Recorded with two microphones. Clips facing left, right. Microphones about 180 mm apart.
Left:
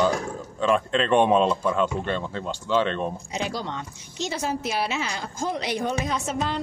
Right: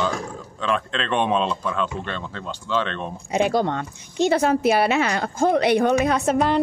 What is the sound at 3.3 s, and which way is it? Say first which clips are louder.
A woman's voice: right 9 dB; 55° right (ahead or behind).